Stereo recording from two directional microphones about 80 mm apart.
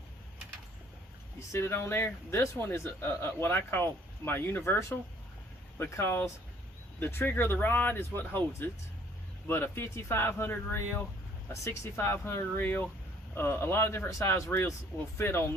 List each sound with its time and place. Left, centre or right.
1.4 s speech: left
9.7 s speech: left
11.5 s speech: left